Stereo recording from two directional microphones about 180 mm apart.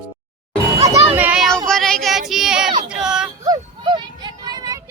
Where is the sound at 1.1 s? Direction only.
10° right (ahead or behind).